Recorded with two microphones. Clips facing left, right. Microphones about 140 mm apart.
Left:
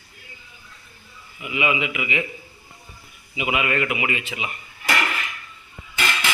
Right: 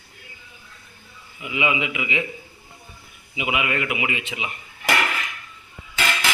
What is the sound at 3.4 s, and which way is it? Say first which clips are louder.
A man's voice: left 2 dB; 15° right (ahead or behind).